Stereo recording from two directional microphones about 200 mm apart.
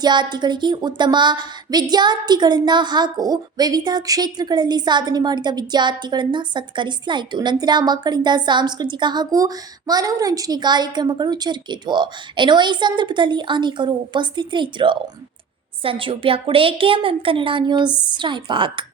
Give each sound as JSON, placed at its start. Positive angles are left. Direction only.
{"t": 0.0, "sound": "a woman's voice", "side_deg": -20}